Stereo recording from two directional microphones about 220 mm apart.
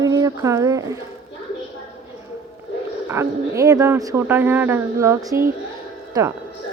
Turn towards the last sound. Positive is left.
turn(degrees=-15)  # may be behind; listen again after turning